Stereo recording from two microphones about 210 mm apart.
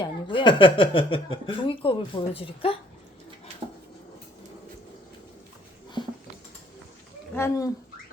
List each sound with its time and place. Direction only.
0.0 s speech: 25° left (ahead or behind)
6.0 s a sound: 20° left (ahead or behind)
7.3 s speech: 15° left (ahead or behind)